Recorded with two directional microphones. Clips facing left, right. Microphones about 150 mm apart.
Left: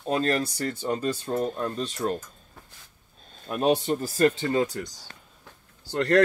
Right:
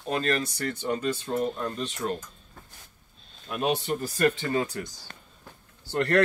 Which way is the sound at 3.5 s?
40° left (ahead or behind).